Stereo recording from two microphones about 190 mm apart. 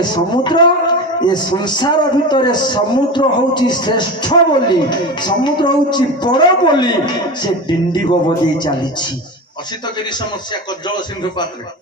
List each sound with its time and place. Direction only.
0.0 s a man's voice: 25° left (ahead or behind)